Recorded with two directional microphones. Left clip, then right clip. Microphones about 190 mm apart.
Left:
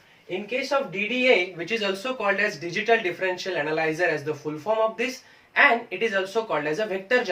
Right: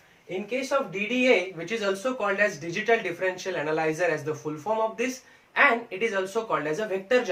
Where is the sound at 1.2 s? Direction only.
20° left (ahead or behind).